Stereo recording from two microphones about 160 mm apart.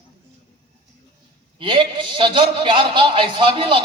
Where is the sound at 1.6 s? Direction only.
30° right (ahead or behind).